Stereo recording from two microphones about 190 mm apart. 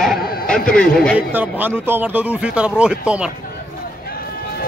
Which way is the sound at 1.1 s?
10° right (ahead or behind).